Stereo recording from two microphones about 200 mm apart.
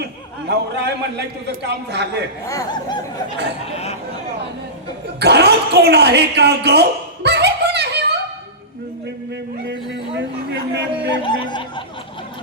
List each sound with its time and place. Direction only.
0.0 s a man's voice: 55° right (ahead or behind)
2.5 s speech: 15° left (ahead or behind)
3.7 s a sound: 30° left (ahead or behind)
5.2 s speech: 55° right (ahead or behind)
9.6 s a sound: 60° right (ahead or behind)
11.2 s music: 25° left (ahead or behind)